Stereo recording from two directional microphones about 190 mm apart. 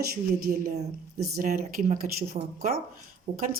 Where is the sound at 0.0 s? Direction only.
50° right (ahead or behind).